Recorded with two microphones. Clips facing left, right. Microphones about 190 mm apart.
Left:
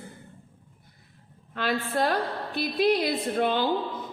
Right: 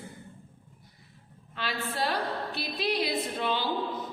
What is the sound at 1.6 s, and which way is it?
A woman's voice, 50° left (ahead or behind).